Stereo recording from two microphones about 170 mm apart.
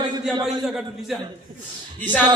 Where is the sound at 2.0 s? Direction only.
10° left (ahead or behind).